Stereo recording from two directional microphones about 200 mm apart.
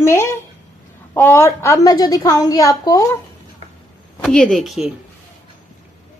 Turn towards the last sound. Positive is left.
turn(degrees=0)  # may be behind; listen again after turning